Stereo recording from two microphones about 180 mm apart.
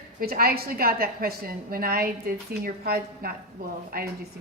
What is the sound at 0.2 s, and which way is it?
A woman's voice, 55° right (ahead or behind).